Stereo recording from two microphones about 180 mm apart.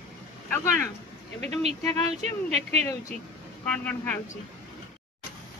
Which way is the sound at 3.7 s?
5° left (ahead or behind).